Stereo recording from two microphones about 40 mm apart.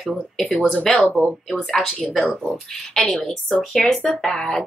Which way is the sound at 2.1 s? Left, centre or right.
Centre.